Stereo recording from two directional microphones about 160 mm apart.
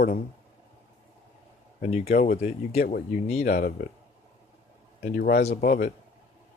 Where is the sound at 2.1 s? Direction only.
60° left (ahead or behind).